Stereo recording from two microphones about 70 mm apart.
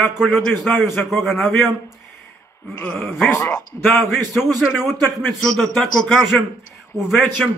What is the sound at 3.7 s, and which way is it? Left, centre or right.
Speech, left.